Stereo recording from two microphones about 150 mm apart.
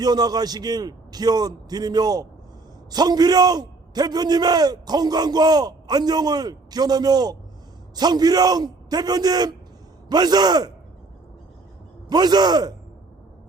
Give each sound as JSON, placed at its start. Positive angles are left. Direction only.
{"t": 0.0, "sound": "a man's voice", "side_deg": -25}
{"t": 12.0, "sound": "a man's voice", "side_deg": -25}